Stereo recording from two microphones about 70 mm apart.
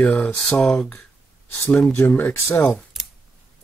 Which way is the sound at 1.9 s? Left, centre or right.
Left.